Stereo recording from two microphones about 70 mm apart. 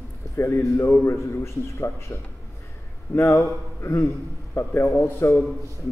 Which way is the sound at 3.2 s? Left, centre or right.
Left.